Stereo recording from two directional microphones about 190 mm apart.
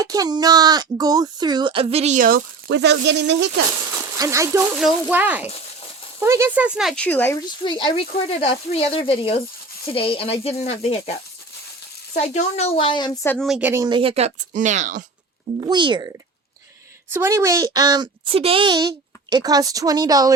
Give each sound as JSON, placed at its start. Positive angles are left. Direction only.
{"t": 0.0, "sound": "speech", "side_deg": -20}
{"t": 4.2, "sound": "speech", "side_deg": -15}
{"t": 4.8, "sound": "speech", "side_deg": 0}
{"t": 7.6, "sound": "speech", "side_deg": 25}
{"t": 12.1, "sound": "speech", "side_deg": 40}
{"t": 13.2, "sound": "speech", "side_deg": 5}
{"t": 13.8, "sound": "speech", "side_deg": -25}
{"t": 15.6, "sound": "speech", "side_deg": -25}